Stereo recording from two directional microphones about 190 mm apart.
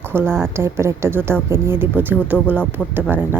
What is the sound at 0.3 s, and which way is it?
Speech, 5° left (ahead or behind).